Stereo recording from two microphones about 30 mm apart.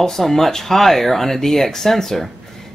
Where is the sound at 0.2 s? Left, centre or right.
Centre.